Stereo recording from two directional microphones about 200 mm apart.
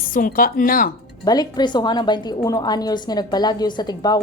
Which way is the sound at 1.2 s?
20° left (ahead or behind).